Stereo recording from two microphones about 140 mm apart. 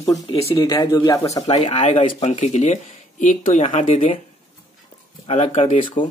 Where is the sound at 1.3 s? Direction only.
35° left (ahead or behind).